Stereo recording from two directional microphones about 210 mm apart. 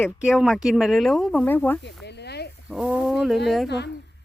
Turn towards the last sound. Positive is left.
turn(degrees=50)  # may be behind; listen again after turning